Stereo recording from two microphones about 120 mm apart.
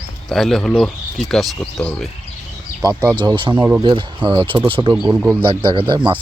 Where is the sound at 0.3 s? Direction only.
Centre (ahead or behind).